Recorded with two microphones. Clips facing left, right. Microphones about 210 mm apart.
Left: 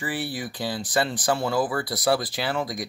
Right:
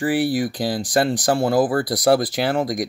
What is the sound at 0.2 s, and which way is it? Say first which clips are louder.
Speech: right 11 dB; 90° right.